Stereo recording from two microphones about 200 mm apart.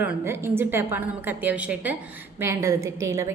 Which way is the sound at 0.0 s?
10° right (ahead or behind).